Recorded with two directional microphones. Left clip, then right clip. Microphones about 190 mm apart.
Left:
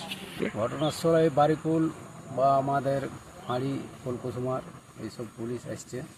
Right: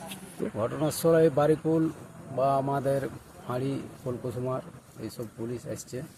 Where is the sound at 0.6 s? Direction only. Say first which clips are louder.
Right 1 dB; 20° right (ahead or behind).